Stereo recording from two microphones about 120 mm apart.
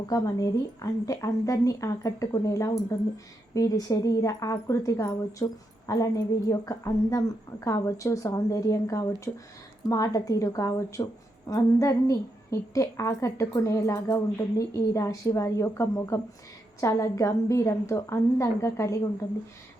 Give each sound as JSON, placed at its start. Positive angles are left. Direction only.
{"t": 0.1, "sound": "a woman's voice", "side_deg": 30}